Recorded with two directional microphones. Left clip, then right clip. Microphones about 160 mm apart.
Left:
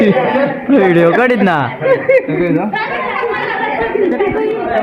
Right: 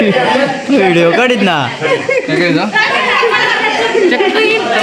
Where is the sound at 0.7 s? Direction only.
5° right (ahead or behind).